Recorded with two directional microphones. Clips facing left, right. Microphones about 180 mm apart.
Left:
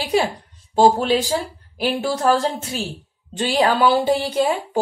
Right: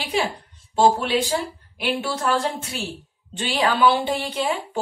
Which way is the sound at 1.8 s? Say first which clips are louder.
Left 4 dB; 35° left (ahead or behind).